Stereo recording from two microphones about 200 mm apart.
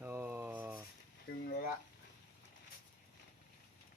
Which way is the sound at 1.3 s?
50° left (ahead or behind).